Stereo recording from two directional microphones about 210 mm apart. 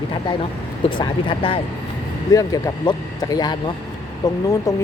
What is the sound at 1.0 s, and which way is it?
Speech, 25° left (ahead or behind).